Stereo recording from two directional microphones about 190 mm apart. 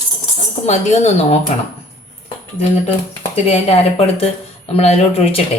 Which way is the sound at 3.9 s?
30° left (ahead or behind).